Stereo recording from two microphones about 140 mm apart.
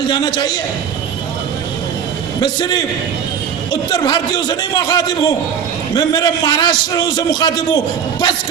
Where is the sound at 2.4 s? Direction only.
30° left (ahead or behind).